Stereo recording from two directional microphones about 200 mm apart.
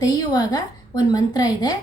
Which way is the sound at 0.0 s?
20° left (ahead or behind).